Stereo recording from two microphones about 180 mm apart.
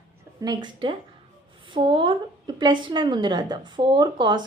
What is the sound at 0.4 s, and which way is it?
Speech, 25° right (ahead or behind).